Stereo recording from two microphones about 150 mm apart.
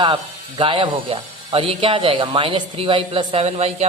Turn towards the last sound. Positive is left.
turn(degrees=-45)  # may be behind; listen again after turning